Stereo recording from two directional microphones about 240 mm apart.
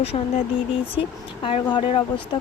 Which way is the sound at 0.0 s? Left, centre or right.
Left.